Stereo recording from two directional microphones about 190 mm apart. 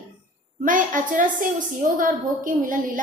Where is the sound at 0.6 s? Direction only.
45° right (ahead or behind).